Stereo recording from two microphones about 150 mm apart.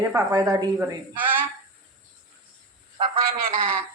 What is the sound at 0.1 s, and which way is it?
Speech, 25° right (ahead or behind).